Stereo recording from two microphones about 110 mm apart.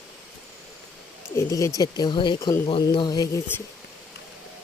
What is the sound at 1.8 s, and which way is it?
Speech, 40° left (ahead or behind).